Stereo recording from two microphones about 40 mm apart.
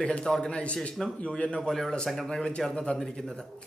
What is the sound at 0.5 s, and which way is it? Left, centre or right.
A man's voice, left.